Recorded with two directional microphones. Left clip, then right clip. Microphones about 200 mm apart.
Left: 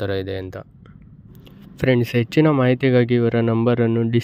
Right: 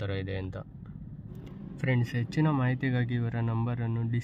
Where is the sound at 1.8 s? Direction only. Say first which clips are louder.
Left 14 dB; 40° left (ahead or behind).